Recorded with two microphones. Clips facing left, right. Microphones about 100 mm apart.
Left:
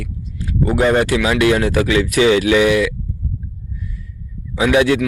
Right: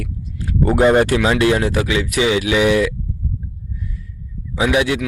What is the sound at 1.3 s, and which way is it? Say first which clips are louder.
Speech: left 1 dB; 25° right (ahead or behind).